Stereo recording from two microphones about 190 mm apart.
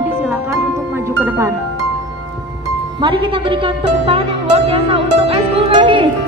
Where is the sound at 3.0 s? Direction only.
25° right (ahead or behind).